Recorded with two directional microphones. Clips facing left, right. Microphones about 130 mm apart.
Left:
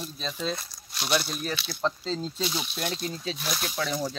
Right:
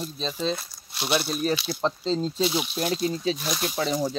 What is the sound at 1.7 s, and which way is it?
Speech, 30° right (ahead or behind).